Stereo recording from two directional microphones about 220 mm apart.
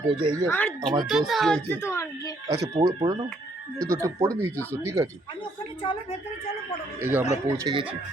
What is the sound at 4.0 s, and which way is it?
Speech, 15° right (ahead or behind).